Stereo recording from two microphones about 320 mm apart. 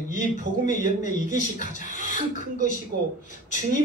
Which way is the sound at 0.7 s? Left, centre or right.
Left.